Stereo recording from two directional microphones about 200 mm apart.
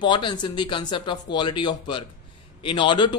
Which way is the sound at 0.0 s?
25° left (ahead or behind).